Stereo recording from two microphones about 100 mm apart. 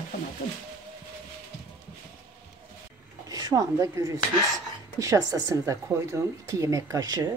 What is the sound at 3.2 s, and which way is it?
Speech, 40° right (ahead or behind).